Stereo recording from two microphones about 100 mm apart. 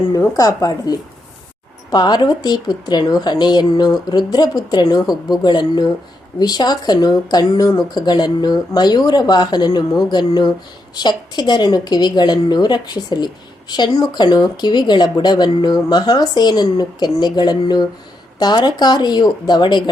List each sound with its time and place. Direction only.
0.1 s a woman's voice: 35° left (ahead or behind)